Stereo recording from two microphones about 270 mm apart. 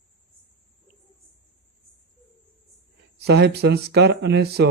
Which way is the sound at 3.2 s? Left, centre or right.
Right.